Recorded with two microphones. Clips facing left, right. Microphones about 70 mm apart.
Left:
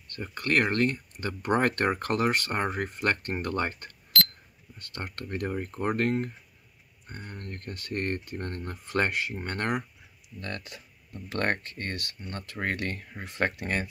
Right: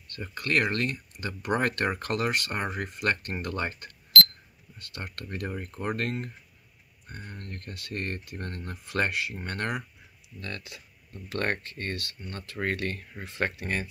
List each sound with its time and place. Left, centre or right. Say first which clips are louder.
0.1 s speech: left 1 dB; left
4.9 s speech: left 2 dB; left
5.5 s speech: left 3 dB; left